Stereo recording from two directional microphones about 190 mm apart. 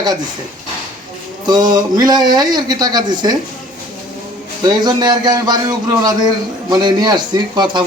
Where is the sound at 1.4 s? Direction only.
20° right (ahead or behind).